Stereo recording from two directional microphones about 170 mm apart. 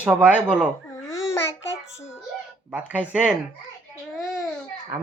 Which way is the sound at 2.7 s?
10° right (ahead or behind).